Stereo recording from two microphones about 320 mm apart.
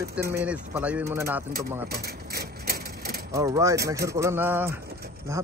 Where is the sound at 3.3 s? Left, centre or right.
Centre.